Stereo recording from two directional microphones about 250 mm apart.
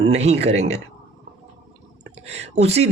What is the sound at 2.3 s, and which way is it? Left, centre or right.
Speech, right.